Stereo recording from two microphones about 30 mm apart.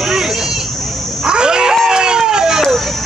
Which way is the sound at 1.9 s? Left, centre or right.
Right.